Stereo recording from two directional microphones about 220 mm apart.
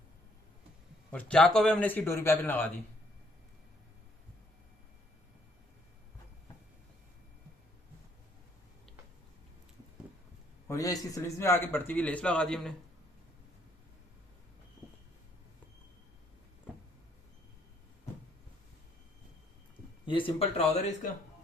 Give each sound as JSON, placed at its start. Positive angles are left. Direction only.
{"t": 1.1, "sound": "a man's voice", "side_deg": 5}
{"t": 10.7, "sound": "a man's voice", "side_deg": 15}
{"t": 20.1, "sound": "speech", "side_deg": 25}